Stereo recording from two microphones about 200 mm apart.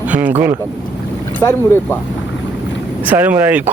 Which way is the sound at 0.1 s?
10° right (ahead or behind).